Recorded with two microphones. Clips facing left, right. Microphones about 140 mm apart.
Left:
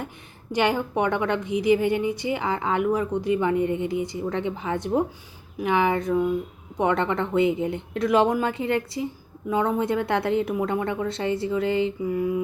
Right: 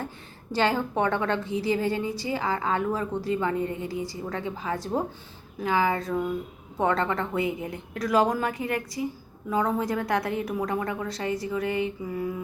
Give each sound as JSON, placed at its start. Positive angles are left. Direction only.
{"t": 0.5, "sound": "a woman's voice", "side_deg": 15}